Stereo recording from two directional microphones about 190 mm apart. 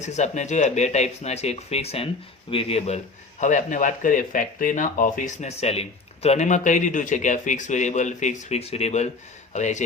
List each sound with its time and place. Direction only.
0.0 s speech: 40° left (ahead or behind)